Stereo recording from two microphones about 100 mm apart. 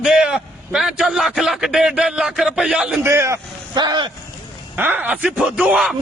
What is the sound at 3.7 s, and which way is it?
Speech, 50° right (ahead or behind).